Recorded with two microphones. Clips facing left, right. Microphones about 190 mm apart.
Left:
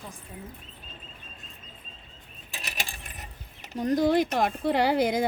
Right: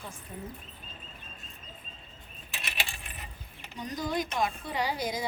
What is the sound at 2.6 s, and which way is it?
Coin, 45° left (ahead or behind).